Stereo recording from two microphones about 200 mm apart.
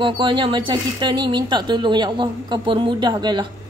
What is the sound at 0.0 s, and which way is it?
Speech, 25° right (ahead or behind).